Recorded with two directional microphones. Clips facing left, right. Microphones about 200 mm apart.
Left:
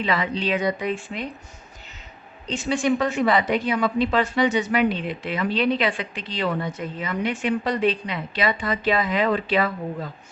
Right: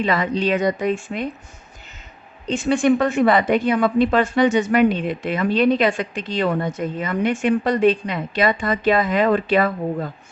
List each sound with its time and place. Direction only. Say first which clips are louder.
0.0 s a woman's voice: right 4 dB; 45° right (ahead or behind)
2.5 s a woman's voice: right 5 dB; 55° right (ahead or behind)